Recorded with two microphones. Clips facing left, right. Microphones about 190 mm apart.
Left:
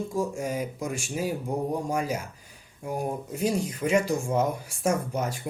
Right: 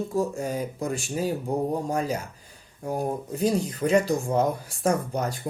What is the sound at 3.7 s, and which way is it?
Speech, 35° right (ahead or behind).